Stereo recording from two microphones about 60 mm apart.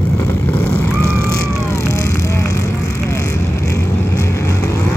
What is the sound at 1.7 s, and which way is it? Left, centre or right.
Vehicle, left.